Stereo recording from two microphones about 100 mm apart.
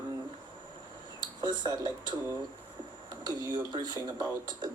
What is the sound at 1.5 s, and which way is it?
Speech, 45° right (ahead or behind).